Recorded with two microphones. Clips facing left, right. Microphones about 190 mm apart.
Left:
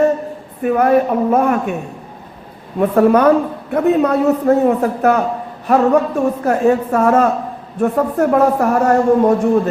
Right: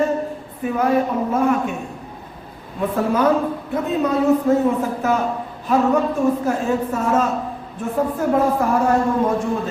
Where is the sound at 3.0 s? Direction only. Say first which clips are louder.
Left 7 dB; 65° left (ahead or behind).